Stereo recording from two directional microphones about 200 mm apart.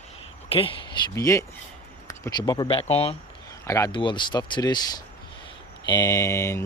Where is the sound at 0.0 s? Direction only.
30° left (ahead or behind).